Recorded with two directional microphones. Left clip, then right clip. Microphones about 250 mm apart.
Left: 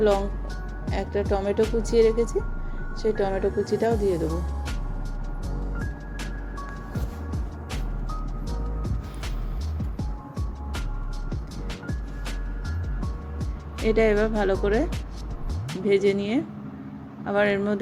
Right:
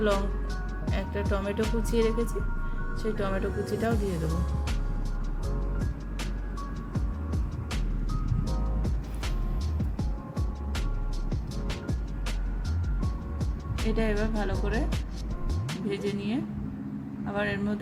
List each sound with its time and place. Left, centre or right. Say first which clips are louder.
0.0 s speech: left 6 dB; centre
5.8 s music: left 2 dB; centre
13.0 s music: right 1 dB; centre
13.9 s speech: left 9 dB; centre
14.5 s speech: left 9 dB; centre
15.9 s speech: left 11 dB; left